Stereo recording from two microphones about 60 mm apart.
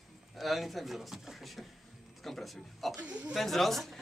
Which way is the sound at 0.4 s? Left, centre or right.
Centre.